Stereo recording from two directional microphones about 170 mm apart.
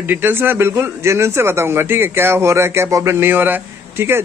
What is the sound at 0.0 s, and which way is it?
Speech, 10° right (ahead or behind).